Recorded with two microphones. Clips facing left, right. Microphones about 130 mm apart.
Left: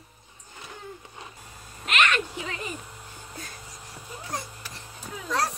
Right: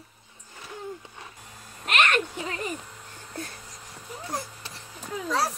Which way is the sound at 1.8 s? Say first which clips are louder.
Right 1 dB; 50° right (ahead or behind).